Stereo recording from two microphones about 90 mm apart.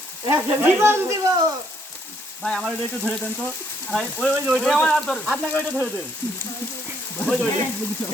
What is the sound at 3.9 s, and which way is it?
Speech, centre (ahead or behind).